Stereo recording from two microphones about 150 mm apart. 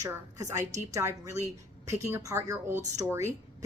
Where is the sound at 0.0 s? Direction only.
20° right (ahead or behind).